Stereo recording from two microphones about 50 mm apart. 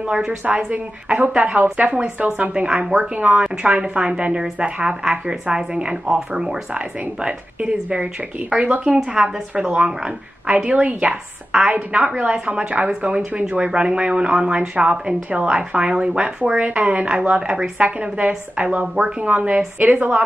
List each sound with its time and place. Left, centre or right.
0.1 s speech: centre
0.7 s a woman's voice: right
10.4 s a woman's voice: right